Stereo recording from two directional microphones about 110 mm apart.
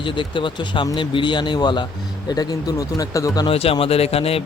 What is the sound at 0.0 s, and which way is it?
Speech, 50° left (ahead or behind).